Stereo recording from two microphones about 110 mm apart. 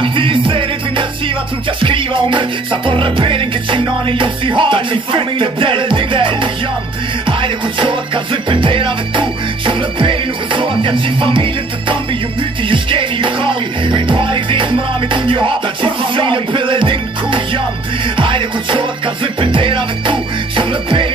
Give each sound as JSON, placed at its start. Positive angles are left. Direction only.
{"t": 0.0, "sound": "music", "side_deg": -50}